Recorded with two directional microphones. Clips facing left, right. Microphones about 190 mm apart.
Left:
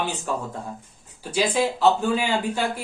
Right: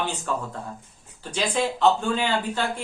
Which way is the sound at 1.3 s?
5° left (ahead or behind).